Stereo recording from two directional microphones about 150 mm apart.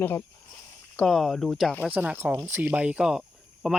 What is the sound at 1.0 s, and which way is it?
Speech, centre (ahead or behind).